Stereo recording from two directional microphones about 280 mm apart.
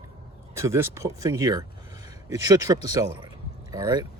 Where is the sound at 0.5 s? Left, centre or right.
Centre.